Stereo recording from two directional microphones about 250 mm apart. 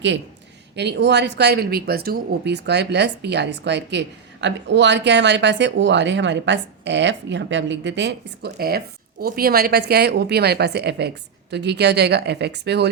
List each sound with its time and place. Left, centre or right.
0.8 s a woman's voice: right